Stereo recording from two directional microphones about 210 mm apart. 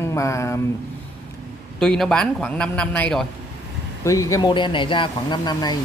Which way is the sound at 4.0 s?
15° left (ahead or behind).